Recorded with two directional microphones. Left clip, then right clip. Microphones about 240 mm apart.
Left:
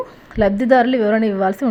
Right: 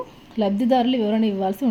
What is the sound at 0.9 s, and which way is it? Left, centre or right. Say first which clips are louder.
Speech: left 6 dB; centre.